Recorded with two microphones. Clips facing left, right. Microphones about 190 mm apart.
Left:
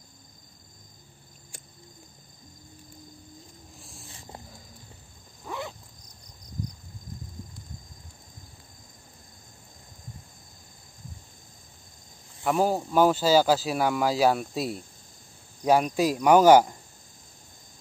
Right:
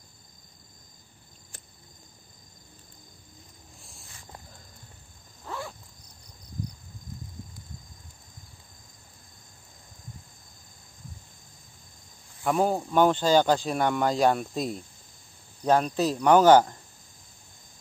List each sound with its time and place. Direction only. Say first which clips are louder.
3.8 s a sound: left 5 dB; centre (ahead or behind)
5.4 s wild animals: left 1 dB; 15° left (ahead or behind)
12.4 s speech: even; 5° left (ahead or behind)